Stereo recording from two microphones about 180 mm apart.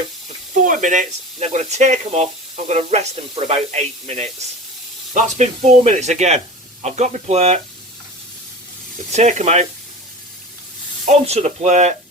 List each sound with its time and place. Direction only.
0.6 s speech: 45° right (ahead or behind)
9.1 s speech: 40° right (ahead or behind)
11.0 s speech: 40° right (ahead or behind)